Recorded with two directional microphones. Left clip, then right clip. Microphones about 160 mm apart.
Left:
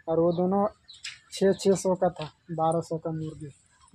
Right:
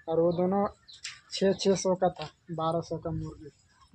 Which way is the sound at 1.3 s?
65° left (ahead or behind).